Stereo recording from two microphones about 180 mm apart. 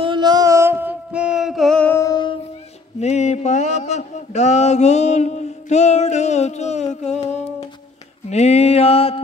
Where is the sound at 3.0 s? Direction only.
40° left (ahead or behind).